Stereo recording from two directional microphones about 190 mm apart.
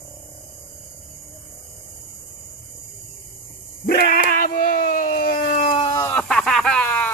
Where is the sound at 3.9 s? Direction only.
55° left (ahead or behind).